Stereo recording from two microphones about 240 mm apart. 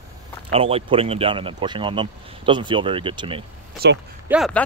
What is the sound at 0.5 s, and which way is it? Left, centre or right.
Speech, right.